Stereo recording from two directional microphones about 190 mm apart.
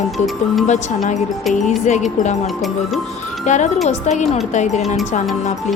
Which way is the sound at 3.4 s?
40° left (ahead or behind).